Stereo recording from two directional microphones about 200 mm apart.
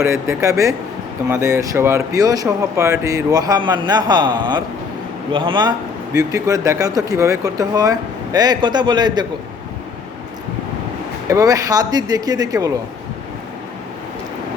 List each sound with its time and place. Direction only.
0.0 s speech: 15° right (ahead or behind)
11.3 s speech: 15° right (ahead or behind)